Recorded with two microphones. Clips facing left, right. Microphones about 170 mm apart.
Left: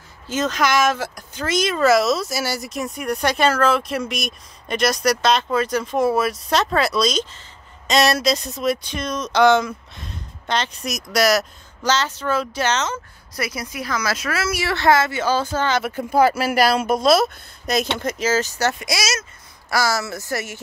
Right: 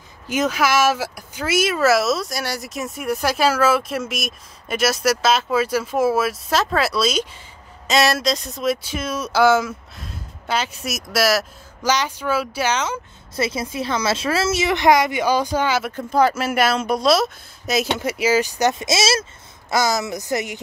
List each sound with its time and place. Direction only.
0.3 s speech: 10° right (ahead or behind)
13.4 s speech: 25° right (ahead or behind)
15.8 s speech: 10° left (ahead or behind); by 20.6 s 20° right (ahead or behind)